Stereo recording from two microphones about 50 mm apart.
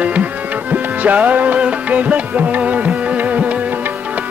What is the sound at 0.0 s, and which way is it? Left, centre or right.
Music, right.